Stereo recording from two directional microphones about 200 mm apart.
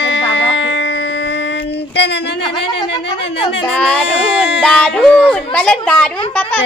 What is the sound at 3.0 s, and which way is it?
Speech, 60° left (ahead or behind).